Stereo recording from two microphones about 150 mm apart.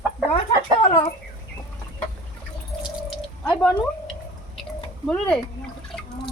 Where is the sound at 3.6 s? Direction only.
10° left (ahead or behind).